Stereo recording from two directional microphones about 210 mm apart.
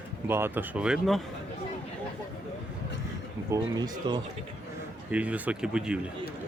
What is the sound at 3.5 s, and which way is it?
Speech, 20° right (ahead or behind).